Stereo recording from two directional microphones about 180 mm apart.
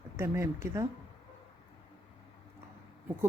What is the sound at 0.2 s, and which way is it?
Speech, 15° right (ahead or behind).